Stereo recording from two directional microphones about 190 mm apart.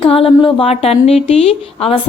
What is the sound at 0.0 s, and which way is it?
Speech, 30° left (ahead or behind).